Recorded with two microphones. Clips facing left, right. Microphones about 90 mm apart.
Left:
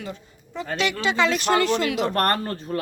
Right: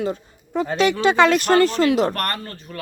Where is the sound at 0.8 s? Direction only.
45° right (ahead or behind).